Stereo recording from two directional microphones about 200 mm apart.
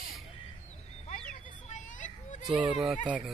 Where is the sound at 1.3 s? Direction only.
40° left (ahead or behind).